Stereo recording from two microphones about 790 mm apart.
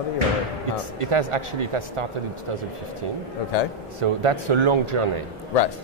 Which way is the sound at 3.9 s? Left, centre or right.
Right.